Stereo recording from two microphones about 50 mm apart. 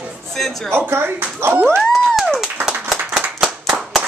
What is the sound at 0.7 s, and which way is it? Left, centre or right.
Speech, right.